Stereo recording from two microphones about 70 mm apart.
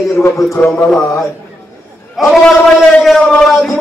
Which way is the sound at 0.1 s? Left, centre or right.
Left.